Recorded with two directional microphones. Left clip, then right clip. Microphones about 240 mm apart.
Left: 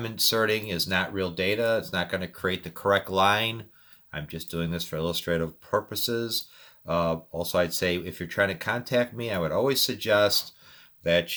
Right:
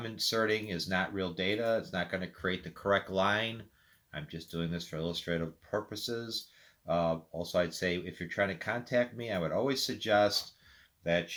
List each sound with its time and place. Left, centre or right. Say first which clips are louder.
0.0 s speech: left 7 dB; left